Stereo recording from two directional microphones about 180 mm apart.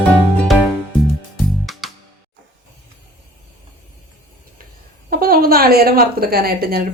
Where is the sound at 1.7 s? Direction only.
Centre (ahead or behind).